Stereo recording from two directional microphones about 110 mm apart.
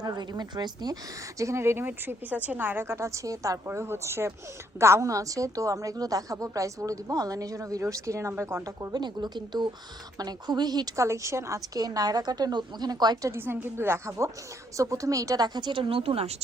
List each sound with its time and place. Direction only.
0.0 s a woman's voice: 40° right (ahead or behind)
1.4 s a woman's voice: 25° right (ahead or behind)
8.9 s a woman's voice: 40° right (ahead or behind)
13.3 s a woman's voice: 20° right (ahead or behind); by 16.3 s 60° right (ahead or behind)